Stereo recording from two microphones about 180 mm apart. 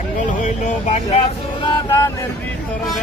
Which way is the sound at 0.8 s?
40° left (ahead or behind).